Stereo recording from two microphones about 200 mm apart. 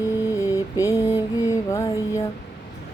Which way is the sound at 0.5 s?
15° left (ahead or behind).